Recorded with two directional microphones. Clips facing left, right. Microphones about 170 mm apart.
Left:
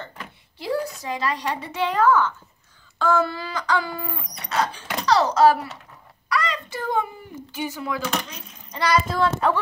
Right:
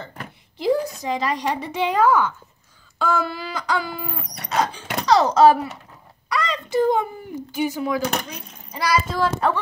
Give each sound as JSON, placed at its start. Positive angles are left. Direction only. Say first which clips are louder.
{"t": 0.6, "sound": "a woman's voice", "louder": "right 5 dB", "side_deg": -20}
{"t": 6.2, "sound": "a sound", "louder": "even", "side_deg": -20}
{"t": 7.5, "sound": "speech", "louder": "right 5 dB", "side_deg": -15}